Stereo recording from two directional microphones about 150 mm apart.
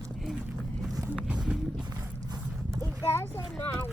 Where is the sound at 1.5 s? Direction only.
5° right (ahead or behind).